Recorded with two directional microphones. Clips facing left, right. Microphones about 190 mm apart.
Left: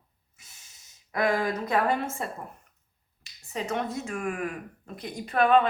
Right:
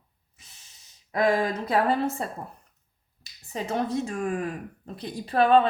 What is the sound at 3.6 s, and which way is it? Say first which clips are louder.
A woman's voice: right 4 dB; 35° right (ahead or behind).